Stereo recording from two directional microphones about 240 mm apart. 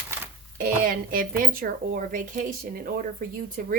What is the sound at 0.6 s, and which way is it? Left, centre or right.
Speech, right.